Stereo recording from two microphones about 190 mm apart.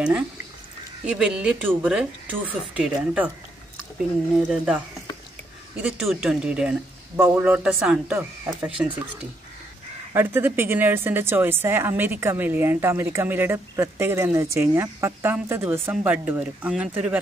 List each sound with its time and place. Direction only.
1.0 s speech: 5° right (ahead or behind)
4.5 s speech: centre (ahead or behind)
10.1 s a woman's voice: 10° right (ahead or behind)